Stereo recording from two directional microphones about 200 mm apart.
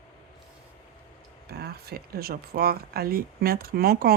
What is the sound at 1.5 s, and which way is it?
Speech, 50° right (ahead or behind).